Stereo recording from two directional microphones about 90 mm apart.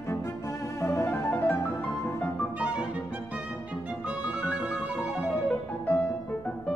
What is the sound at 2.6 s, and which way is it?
Violin, 15° right (ahead or behind).